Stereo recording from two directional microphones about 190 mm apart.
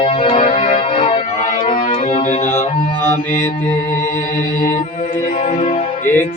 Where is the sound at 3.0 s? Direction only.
15° left (ahead or behind).